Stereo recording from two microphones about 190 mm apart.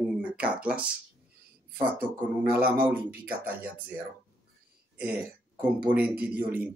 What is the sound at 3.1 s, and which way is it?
Speech, 55° right (ahead or behind).